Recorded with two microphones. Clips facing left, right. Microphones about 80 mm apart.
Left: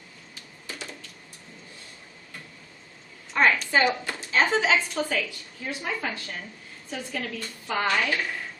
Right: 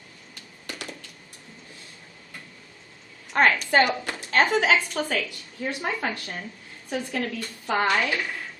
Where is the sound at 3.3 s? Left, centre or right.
Right.